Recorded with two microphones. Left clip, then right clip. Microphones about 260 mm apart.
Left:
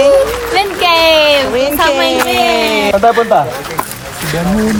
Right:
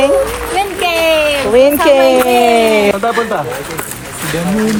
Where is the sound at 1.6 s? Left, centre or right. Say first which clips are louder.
Right 3 dB; right.